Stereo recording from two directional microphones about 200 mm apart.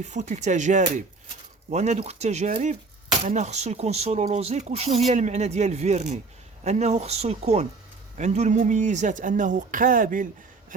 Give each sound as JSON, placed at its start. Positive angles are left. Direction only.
{"t": 0.0, "sound": "speech", "side_deg": -35}